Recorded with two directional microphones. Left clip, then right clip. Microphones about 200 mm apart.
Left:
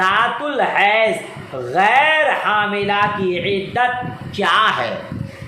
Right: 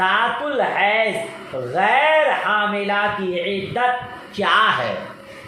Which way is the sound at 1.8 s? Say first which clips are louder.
Left 2 dB; 35° left (ahead or behind).